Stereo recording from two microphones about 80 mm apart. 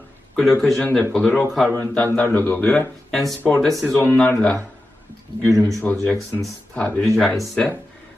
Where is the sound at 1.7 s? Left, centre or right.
Left.